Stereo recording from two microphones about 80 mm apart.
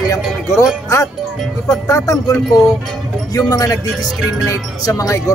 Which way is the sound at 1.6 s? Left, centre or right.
Left.